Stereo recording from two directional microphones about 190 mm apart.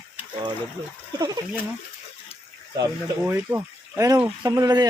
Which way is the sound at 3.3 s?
15° right (ahead or behind).